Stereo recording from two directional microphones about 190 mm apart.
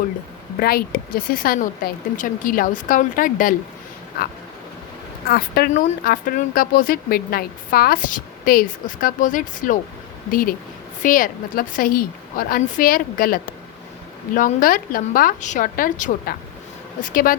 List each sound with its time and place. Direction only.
0.6 s speech: 55° left (ahead or behind)
5.3 s speech: 50° left (ahead or behind)
11.0 s speech: 45° left (ahead or behind)